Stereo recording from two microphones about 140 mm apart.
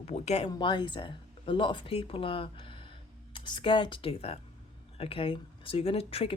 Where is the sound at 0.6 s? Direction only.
35° left (ahead or behind).